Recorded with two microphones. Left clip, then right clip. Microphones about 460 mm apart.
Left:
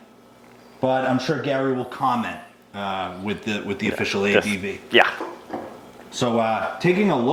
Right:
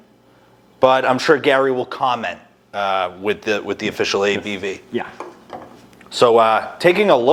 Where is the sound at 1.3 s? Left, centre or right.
Centre.